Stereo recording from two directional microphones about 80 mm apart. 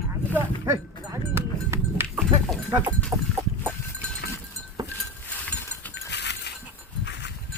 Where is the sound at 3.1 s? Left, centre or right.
Right.